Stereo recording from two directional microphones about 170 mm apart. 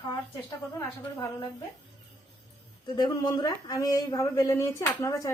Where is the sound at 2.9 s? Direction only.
25° left (ahead or behind).